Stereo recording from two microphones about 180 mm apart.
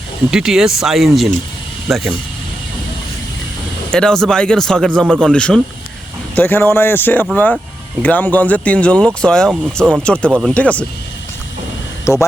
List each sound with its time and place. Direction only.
0.3 s speech: 5° right (ahead or behind)
3.9 s speech: 5° left (ahead or behind)
10.0 s speech: 5° left (ahead or behind)
12.1 s speech: 15° left (ahead or behind)